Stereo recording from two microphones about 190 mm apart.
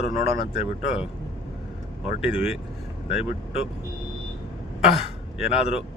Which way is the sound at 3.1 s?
35° left (ahead or behind).